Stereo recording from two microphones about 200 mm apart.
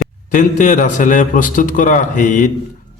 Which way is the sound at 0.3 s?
40° left (ahead or behind).